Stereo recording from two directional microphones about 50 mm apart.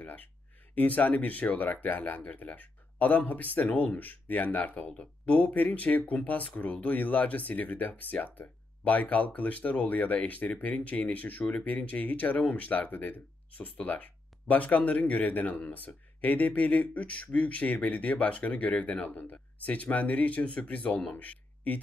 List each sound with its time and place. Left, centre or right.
0.7 s a man's voice: left